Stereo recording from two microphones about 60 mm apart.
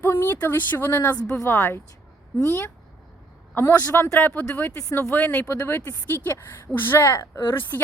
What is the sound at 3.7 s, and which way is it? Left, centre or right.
Speech, left.